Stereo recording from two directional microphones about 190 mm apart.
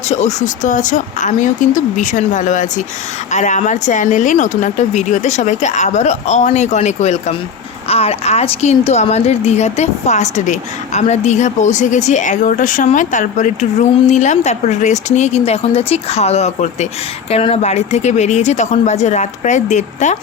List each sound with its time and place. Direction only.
0.1 s a woman's voice: 35° left (ahead or behind)